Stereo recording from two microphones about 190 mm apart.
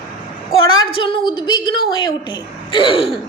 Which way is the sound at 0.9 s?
25° left (ahead or behind).